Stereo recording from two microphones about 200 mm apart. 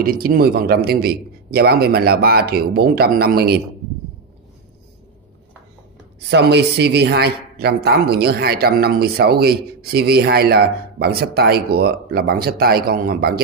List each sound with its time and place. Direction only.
0.0 s speech: 45° right (ahead or behind)
6.3 s speech: 55° right (ahead or behind)